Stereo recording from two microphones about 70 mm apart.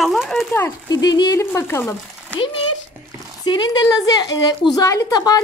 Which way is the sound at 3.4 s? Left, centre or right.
Left.